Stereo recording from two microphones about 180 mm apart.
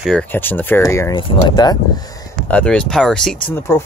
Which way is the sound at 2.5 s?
5° left (ahead or behind).